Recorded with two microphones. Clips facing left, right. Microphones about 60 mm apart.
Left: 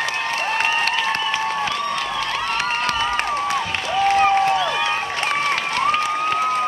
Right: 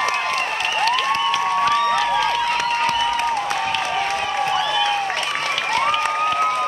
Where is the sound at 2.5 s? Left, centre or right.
Left.